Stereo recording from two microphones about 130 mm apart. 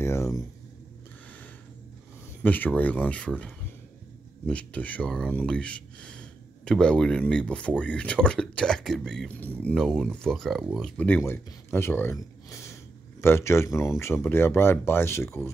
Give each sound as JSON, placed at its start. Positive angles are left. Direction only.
{"t": 0.0, "sound": "a sound", "side_deg": 25}
{"t": 2.4, "sound": "speech", "side_deg": 15}
{"t": 11.2, "sound": "speech", "side_deg": 15}